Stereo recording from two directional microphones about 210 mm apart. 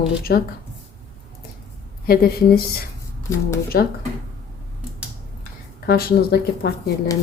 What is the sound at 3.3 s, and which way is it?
Speech, 15° left (ahead or behind).